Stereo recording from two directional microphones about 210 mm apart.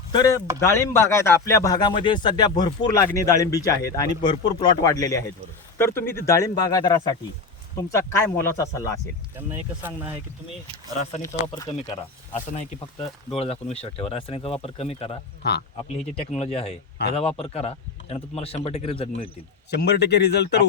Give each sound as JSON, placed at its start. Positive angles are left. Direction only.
{"t": 0.1, "sound": "speech", "side_deg": 20}
{"t": 11.2, "sound": "speech", "side_deg": 15}
{"t": 13.3, "sound": "speech", "side_deg": 30}
{"t": 19.7, "sound": "speech", "side_deg": 50}